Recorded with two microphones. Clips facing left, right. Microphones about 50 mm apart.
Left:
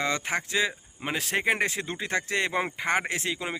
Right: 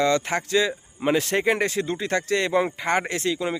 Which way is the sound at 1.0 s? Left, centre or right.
Centre.